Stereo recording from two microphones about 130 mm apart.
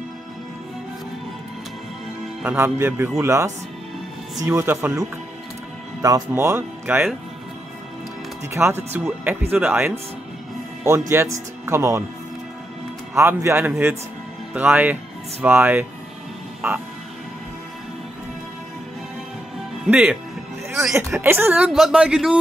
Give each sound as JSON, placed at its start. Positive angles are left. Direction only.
{"t": 2.4, "sound": "speech", "side_deg": -20}
{"t": 6.0, "sound": "speech", "side_deg": -25}
{"t": 8.5, "sound": "speech", "side_deg": -20}
{"t": 13.1, "sound": "speech", "side_deg": -20}
{"t": 19.8, "sound": "speech", "side_deg": -5}
{"t": 21.2, "sound": "speech", "side_deg": -15}